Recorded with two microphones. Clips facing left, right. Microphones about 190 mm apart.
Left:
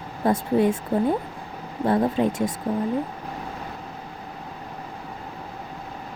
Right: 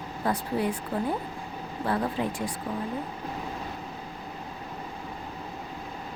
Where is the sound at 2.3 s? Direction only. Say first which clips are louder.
Left 7 dB; 45° left (ahead or behind).